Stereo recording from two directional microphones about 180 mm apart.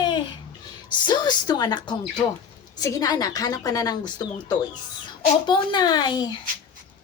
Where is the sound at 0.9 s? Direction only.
25° left (ahead or behind).